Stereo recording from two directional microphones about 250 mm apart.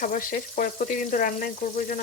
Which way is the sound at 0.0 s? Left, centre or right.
Left.